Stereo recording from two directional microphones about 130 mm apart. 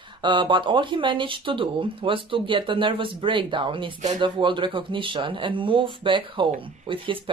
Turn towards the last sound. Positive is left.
turn(degrees=-40)  # may be behind; listen again after turning